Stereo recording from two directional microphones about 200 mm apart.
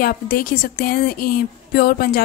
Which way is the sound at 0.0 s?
45° left (ahead or behind).